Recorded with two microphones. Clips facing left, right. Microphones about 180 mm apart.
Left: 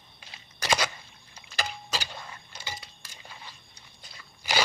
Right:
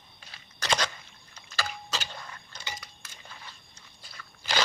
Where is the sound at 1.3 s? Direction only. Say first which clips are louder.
Left 1 dB; 15° left (ahead or behind).